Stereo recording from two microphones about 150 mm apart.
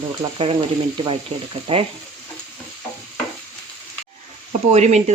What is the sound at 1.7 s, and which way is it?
Speech, 35° right (ahead or behind).